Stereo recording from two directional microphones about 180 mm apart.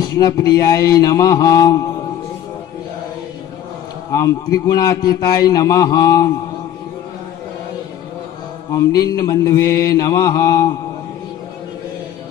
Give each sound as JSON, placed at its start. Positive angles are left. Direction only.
{"t": 0.0, "sound": "a man's voice", "side_deg": 20}
{"t": 4.1, "sound": "a man's voice", "side_deg": 20}
{"t": 8.7, "sound": "a man's voice", "side_deg": 20}